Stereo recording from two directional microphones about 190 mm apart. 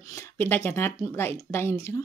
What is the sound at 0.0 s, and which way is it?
A woman's voice, 15° left (ahead or behind).